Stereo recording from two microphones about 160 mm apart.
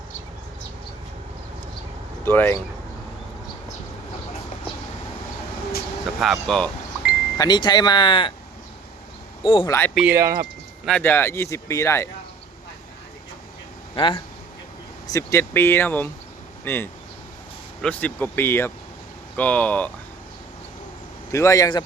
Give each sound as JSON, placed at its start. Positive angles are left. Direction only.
{"t": 2.2, "sound": "speech", "side_deg": 15}
{"t": 6.1, "sound": "speech", "side_deg": 0}
{"t": 7.3, "sound": "speech", "side_deg": 25}
{"t": 9.4, "sound": "speech", "side_deg": 30}
{"t": 9.6, "sound": "speech", "side_deg": 15}
{"t": 9.9, "sound": "speech", "side_deg": -5}
{"t": 10.2, "sound": "speech", "side_deg": -20}
{"t": 11.0, "sound": "speech", "side_deg": 15}
{"t": 13.9, "sound": "speech", "side_deg": 35}
{"t": 15.0, "sound": "speech", "side_deg": 20}
{"t": 21.3, "sound": "speech", "side_deg": 20}